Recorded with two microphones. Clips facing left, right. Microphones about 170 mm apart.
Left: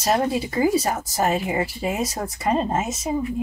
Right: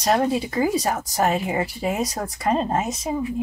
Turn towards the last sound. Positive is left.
turn(degrees=5)  # may be behind; listen again after turning